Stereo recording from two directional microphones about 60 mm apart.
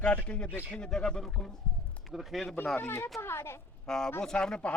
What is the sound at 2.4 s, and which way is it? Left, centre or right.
Speech, left.